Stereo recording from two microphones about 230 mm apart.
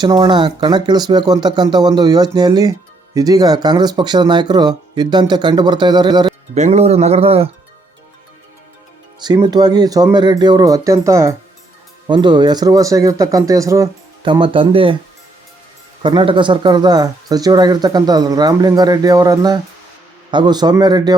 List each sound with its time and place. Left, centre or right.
0.0 s speech: centre
6.5 s speech: right
9.2 s speech: centre
16.0 s speech: right